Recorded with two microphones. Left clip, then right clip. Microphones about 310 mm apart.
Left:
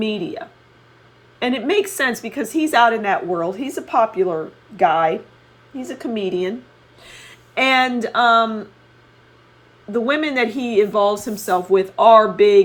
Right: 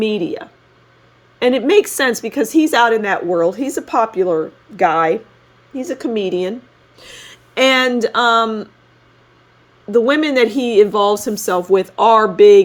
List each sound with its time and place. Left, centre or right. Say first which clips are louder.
0.0 s a woman's voice: right 5 dB; right
7.3 s a sound: right 4 dB; right
8.0 s a woman's voice: right 1 dB; right
9.9 s a woman's voice: right 6 dB; right